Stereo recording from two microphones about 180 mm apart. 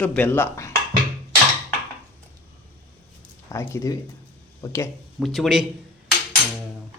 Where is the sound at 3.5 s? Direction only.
15° left (ahead or behind).